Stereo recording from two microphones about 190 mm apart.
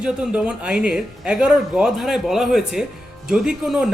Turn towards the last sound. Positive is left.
turn(degrees=-5)  # may be behind; listen again after turning